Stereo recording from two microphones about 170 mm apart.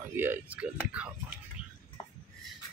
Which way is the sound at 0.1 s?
10° right (ahead or behind).